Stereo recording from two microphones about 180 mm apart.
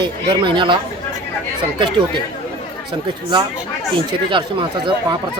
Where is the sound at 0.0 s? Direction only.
25° right (ahead or behind).